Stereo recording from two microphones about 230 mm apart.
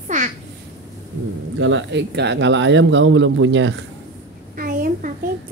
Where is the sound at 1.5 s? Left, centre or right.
Right.